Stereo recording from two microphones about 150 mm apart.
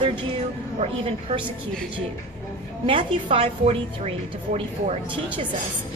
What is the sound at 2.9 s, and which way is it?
A woman's voice, 35° right (ahead or behind).